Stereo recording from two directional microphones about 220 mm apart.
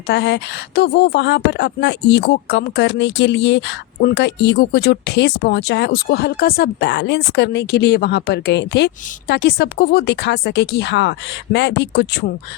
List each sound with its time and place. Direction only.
0.1 s speech: 50° left (ahead or behind)